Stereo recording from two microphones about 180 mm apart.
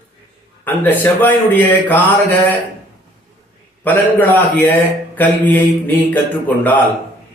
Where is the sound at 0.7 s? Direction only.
10° left (ahead or behind).